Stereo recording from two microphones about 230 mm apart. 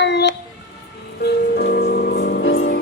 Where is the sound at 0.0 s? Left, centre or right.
Left.